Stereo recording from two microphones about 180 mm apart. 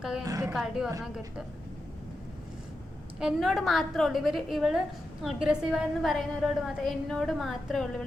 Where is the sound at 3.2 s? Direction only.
Centre (ahead or behind).